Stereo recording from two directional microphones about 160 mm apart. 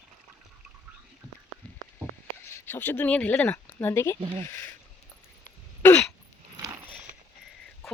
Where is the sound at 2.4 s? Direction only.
15° left (ahead or behind).